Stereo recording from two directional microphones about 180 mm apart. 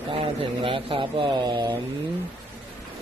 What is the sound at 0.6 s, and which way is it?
A man's voice, 30° right (ahead or behind).